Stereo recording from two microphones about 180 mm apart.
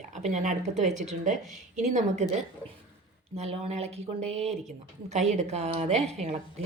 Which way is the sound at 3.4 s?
35° right (ahead or behind).